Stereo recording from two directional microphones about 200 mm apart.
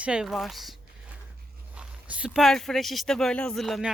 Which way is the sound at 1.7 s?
5° right (ahead or behind).